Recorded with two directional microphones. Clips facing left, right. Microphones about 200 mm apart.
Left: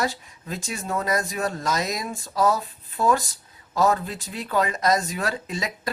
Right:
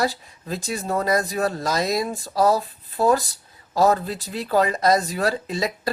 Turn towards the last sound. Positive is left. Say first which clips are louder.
# right 5 dB
turn(degrees=-35)  # may be behind; listen again after turning